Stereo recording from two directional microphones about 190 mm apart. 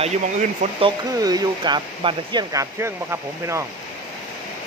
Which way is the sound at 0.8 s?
20° right (ahead or behind).